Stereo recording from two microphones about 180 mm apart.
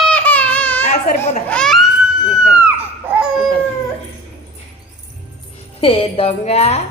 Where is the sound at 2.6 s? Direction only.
5° right (ahead or behind).